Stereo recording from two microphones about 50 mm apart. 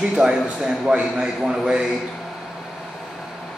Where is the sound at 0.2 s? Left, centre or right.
Centre.